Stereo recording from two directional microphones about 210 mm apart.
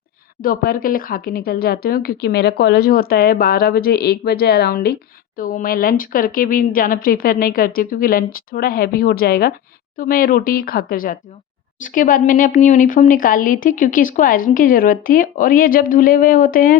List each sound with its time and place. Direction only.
0.4 s speech: 45° left (ahead or behind)